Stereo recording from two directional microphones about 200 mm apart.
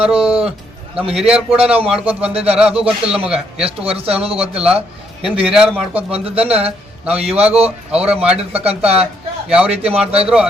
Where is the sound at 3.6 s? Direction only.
30° right (ahead or behind).